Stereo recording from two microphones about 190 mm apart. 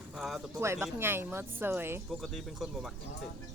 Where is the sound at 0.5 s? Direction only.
15° right (ahead or behind).